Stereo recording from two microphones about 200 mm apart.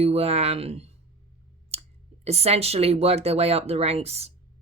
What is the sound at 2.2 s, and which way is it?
Speech, 30° right (ahead or behind).